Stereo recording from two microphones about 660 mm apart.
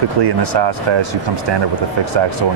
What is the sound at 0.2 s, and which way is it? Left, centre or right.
Speech, right.